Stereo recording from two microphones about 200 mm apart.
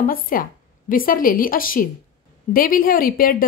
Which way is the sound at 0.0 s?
45° left (ahead or behind).